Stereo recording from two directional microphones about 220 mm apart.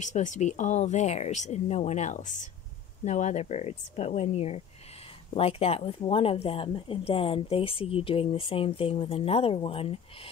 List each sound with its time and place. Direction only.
0.0 s speech: 35° left (ahead or behind)